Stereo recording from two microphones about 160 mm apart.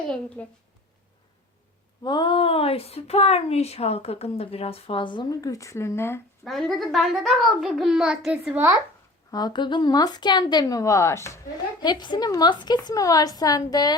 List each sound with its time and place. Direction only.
0.4 s a woman's voice: 10° left (ahead or behind)
2.0 s speech: 30° left (ahead or behind)
6.4 s a child's voice: centre (ahead or behind)
9.3 s a woman's voice: 25° left (ahead or behind)